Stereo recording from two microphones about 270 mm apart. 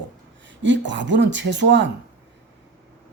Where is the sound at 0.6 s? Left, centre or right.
Right.